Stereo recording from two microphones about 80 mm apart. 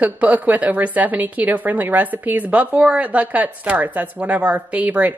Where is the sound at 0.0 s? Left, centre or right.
Centre.